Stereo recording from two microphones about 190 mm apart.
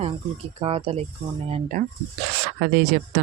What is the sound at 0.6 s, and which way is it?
Speech, 30° right (ahead or behind).